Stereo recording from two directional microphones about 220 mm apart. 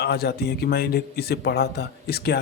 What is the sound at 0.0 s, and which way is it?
Speech, 50° left (ahead or behind).